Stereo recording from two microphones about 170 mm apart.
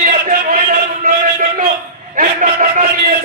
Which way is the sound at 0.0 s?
50° right (ahead or behind).